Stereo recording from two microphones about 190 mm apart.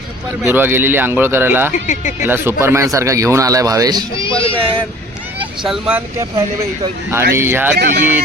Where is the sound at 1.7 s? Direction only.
40° left (ahead or behind).